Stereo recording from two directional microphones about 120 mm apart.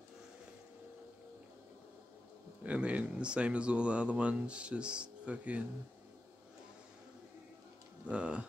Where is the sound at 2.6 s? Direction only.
10° right (ahead or behind).